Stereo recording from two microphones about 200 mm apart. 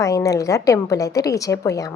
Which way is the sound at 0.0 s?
15° left (ahead or behind).